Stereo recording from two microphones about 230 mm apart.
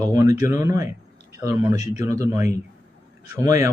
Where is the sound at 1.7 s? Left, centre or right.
Left.